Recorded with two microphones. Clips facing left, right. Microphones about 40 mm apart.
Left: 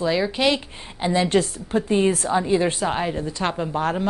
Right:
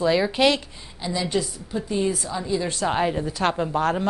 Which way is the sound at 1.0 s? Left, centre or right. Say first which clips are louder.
Left 6 dB; left.